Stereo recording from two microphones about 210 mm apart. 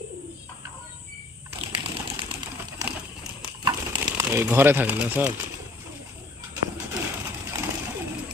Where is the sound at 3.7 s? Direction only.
15° right (ahead or behind).